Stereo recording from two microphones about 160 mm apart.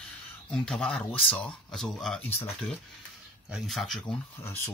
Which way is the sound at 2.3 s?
15° left (ahead or behind).